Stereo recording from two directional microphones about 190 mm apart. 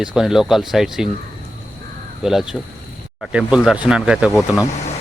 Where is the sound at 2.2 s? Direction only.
Centre (ahead or behind).